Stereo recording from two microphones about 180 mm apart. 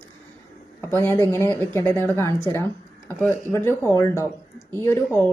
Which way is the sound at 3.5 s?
15° left (ahead or behind).